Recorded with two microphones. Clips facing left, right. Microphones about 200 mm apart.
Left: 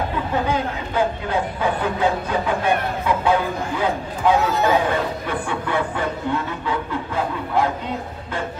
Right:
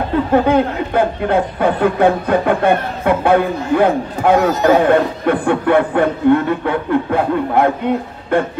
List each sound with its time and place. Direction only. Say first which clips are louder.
0.3 s speech: right 11 dB; 60° right (ahead or behind)